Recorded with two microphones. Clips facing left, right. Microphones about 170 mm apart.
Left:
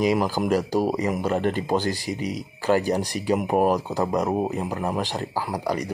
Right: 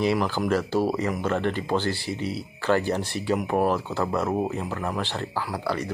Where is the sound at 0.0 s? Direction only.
15° left (ahead or behind).